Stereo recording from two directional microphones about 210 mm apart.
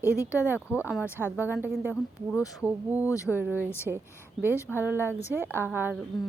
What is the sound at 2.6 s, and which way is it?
Speech, 10° right (ahead or behind).